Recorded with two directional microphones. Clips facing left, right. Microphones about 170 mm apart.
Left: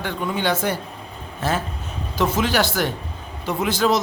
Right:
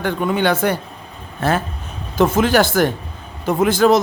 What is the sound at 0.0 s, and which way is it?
A man's voice, 55° right (ahead or behind).